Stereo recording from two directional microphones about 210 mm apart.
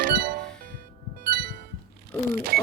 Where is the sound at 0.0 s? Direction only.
45° right (ahead or behind).